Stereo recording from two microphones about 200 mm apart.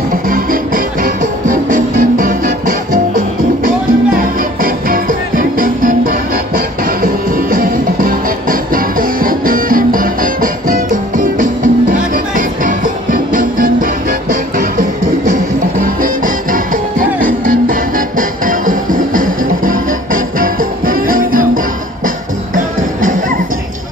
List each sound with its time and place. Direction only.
0.1 s music: 45° right (ahead or behind)